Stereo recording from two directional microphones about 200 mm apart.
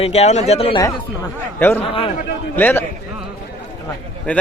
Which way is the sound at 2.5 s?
10° left (ahead or behind).